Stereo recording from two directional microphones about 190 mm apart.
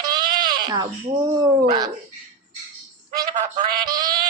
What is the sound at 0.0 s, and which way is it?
Speech, 20° right (ahead or behind).